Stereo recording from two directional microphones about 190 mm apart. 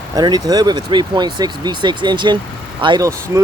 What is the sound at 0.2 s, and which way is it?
Speech, 20° right (ahead or behind).